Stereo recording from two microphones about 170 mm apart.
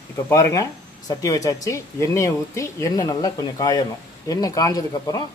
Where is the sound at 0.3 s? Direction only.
20° left (ahead or behind).